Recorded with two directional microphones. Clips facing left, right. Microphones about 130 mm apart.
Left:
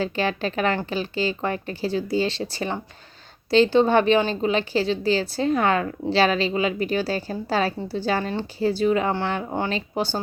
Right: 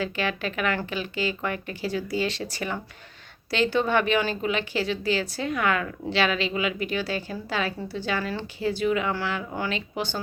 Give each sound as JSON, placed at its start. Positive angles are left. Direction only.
{"t": 0.0, "sound": "a woman's voice", "side_deg": 30}